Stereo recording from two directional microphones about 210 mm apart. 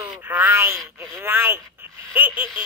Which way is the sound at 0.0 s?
10° right (ahead or behind).